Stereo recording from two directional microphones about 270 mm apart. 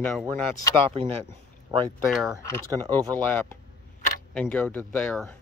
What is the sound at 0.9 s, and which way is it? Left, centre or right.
Speech, right.